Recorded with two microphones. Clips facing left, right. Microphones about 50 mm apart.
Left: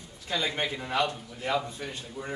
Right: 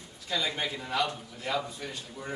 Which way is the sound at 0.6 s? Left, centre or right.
Left.